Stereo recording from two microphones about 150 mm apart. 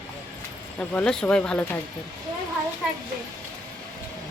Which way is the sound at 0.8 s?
10° left (ahead or behind).